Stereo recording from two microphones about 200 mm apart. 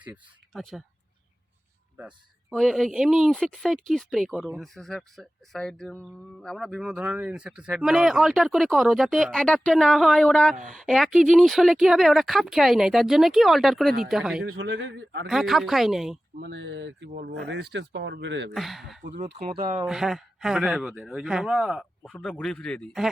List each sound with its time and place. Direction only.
0.5 s speech: centre (ahead or behind)
2.0 s speech: centre (ahead or behind)
14.4 s speech: 70° right (ahead or behind)
15.3 s speech: centre (ahead or behind)
16.4 s speech: 65° right (ahead or behind)
18.5 s speech: centre (ahead or behind)
19.1 s speech: 35° right (ahead or behind)
19.8 s speech: centre (ahead or behind)